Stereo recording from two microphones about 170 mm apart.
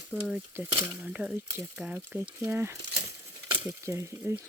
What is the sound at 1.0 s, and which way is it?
Speech, 5° right (ahead or behind).